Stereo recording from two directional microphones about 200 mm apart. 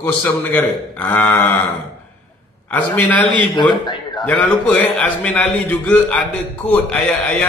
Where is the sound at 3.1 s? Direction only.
5° left (ahead or behind).